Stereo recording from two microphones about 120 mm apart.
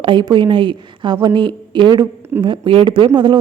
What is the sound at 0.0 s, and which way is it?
A woman's voice, 40° right (ahead or behind).